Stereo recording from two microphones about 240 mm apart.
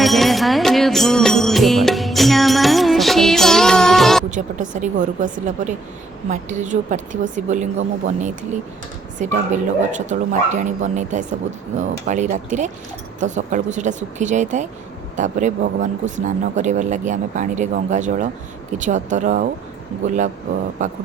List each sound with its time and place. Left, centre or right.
0.0 s music: centre
4.3 s speech: right
20.8 s speech: right